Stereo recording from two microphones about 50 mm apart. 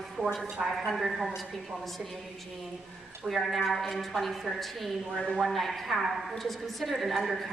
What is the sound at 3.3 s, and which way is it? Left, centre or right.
A woman's voice, centre.